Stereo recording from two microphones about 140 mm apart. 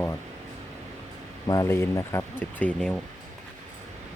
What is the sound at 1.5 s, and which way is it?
Speech, 20° left (ahead or behind).